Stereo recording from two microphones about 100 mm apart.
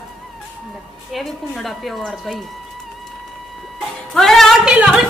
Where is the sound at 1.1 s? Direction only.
Centre (ahead or behind).